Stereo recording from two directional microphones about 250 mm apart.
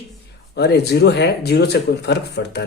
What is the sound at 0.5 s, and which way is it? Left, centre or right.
Speech, left.